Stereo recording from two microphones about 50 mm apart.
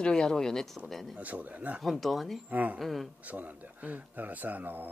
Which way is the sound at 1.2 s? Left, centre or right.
Right.